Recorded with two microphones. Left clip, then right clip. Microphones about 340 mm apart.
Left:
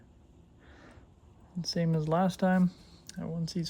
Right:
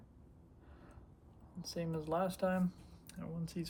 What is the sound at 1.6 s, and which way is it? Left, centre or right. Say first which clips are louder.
Speech: left 8 dB; centre.